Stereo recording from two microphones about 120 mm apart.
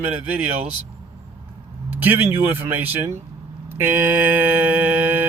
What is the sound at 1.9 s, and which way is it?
Mantra, 15° right (ahead or behind).